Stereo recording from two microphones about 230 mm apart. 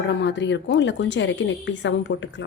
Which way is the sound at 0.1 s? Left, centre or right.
Left.